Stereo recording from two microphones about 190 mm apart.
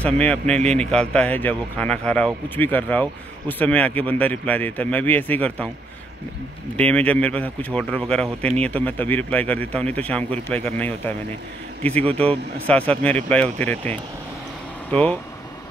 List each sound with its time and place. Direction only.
0.0 s a man's voice: 5° left (ahead or behind)
6.8 s a man's voice: 5° left (ahead or behind)